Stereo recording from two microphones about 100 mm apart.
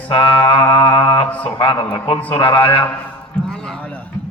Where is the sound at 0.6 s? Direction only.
50° left (ahead or behind).